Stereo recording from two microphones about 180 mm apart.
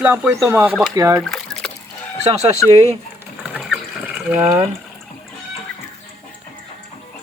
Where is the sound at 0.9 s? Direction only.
20° right (ahead or behind).